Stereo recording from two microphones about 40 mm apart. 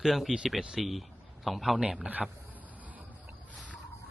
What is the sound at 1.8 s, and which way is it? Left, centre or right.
Speech, right.